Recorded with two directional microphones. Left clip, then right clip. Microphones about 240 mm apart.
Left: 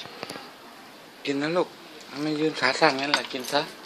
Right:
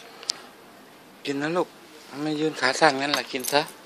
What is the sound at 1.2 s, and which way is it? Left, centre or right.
Speech, centre.